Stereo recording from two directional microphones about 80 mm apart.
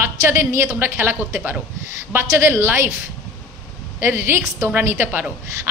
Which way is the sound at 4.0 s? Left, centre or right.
Right.